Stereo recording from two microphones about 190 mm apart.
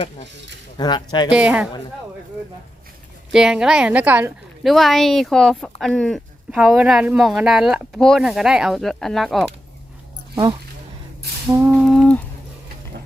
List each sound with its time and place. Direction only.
0.8 s speech: 20° left (ahead or behind)
1.3 s a woman's voice: 5° right (ahead or behind)
3.3 s a woman's voice: 5° right (ahead or behind)
11.5 s a woman's voice: 5° right (ahead or behind)